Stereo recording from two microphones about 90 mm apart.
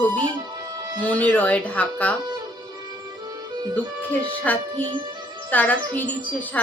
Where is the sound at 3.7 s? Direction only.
20° left (ahead or behind).